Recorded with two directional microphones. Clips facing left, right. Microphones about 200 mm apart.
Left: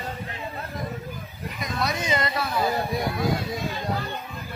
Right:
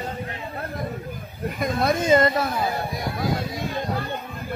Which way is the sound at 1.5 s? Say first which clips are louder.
Right 6 dB; 50° right (ahead or behind).